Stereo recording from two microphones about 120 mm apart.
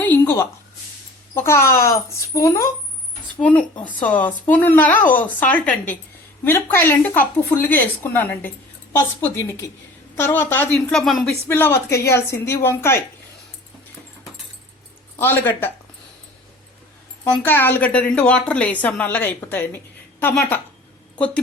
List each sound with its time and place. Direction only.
0.0 s a sound: 15° left (ahead or behind)
1.4 s a woman's voice: 20° left (ahead or behind)
3.4 s a woman's voice: 10° left (ahead or behind)
10.9 s speech: 5° left (ahead or behind)
11.4 s a woman's voice: 20° left (ahead or behind)
15.1 s speech: 20° left (ahead or behind)
17.4 s speech: 15° left (ahead or behind)